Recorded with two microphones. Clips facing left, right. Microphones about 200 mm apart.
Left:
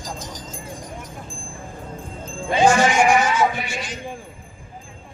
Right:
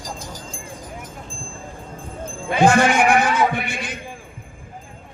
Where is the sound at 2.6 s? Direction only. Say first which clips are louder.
Right 1 dB; 60° right (ahead or behind).